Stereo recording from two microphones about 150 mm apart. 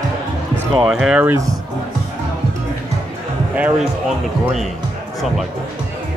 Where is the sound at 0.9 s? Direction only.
5° right (ahead or behind).